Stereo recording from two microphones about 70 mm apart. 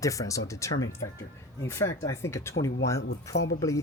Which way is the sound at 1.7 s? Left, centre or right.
Left.